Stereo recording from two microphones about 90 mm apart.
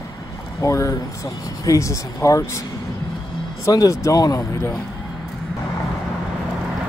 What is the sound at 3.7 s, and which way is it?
Speech, 40° left (ahead or behind).